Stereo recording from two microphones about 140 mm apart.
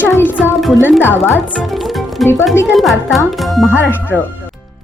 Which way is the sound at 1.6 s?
Centre (ahead or behind).